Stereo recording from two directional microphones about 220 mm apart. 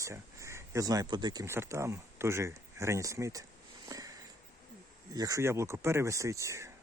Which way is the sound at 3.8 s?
15° right (ahead or behind).